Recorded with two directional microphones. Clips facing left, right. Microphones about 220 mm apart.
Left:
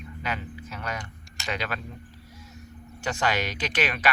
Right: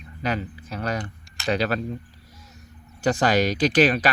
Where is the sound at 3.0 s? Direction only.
35° right (ahead or behind).